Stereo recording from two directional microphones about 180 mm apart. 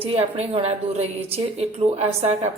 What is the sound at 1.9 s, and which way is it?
Speech, 35° right (ahead or behind).